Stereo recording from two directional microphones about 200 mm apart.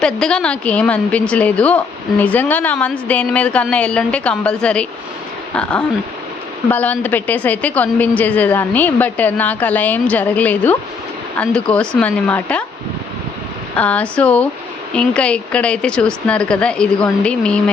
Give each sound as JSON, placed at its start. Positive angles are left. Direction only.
{"t": 0.0, "sound": "a woman's voice", "side_deg": 5}
{"t": 6.7, "sound": "a woman's voice", "side_deg": 10}
{"t": 13.7, "sound": "a woman's voice", "side_deg": 5}